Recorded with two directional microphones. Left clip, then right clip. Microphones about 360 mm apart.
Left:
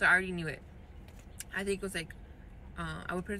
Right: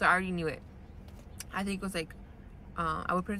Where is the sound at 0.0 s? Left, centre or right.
Centre.